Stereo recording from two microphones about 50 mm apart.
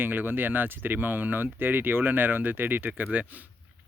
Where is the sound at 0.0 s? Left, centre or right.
Right.